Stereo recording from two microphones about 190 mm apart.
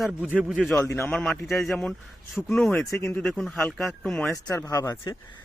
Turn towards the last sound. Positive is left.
turn(degrees=15)  # may be behind; listen again after turning